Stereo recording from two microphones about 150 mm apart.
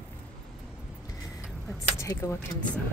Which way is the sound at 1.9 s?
20° left (ahead or behind).